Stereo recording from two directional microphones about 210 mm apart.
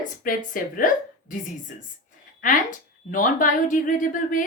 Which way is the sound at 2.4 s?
40° left (ahead or behind).